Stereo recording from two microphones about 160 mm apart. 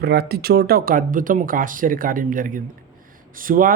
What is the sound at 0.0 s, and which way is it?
Speech, 80° right.